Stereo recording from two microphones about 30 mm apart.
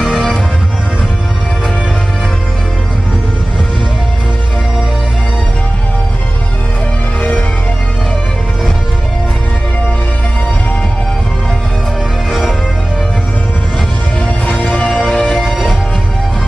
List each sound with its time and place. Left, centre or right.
7.2 s music: left
14.5 s music: left
14.9 s music: left
15.3 s music: centre